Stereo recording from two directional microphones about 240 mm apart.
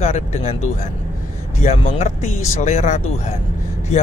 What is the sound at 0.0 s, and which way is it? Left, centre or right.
Speech, left.